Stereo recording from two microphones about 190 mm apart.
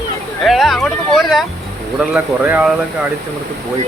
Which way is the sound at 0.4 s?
Centre (ahead or behind).